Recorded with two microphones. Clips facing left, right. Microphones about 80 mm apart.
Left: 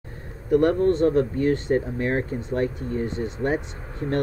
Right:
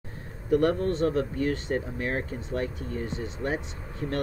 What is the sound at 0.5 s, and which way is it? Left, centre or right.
Speech, left.